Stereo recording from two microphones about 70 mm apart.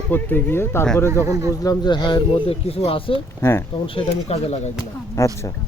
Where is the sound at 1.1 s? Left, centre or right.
Right.